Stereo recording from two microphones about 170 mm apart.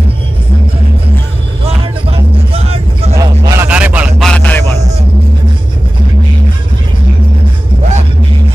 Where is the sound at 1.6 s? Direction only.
35° right (ahead or behind).